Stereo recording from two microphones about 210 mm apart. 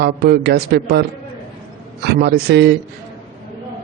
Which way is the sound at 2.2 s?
50° right (ahead or behind).